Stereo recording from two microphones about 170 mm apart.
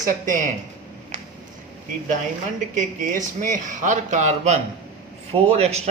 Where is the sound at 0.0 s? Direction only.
50° right (ahead or behind).